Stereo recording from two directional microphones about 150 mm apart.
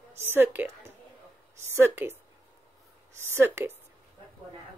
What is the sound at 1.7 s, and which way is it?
Speech, 15° right (ahead or behind).